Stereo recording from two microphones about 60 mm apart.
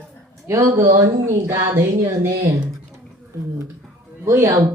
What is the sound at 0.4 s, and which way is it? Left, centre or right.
Speech, right.